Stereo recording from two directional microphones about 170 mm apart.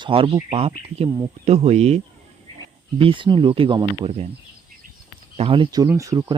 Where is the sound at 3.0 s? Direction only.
30° right (ahead or behind).